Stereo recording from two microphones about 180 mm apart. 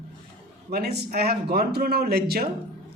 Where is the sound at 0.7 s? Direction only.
60° right (ahead or behind).